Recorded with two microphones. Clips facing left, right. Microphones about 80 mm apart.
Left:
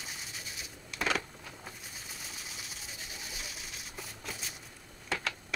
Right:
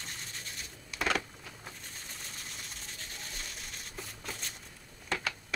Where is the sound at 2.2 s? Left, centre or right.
Centre.